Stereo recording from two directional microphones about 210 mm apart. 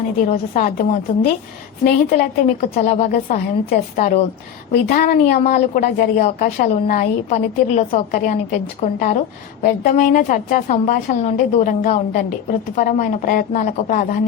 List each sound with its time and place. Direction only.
0.3 s a woman's voice: 35° left (ahead or behind)